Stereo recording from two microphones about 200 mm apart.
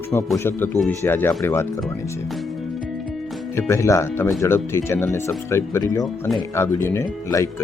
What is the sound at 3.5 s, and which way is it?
Speech, 15° left (ahead or behind).